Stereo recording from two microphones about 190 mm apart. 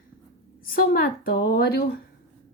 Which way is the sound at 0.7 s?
50° left (ahead or behind).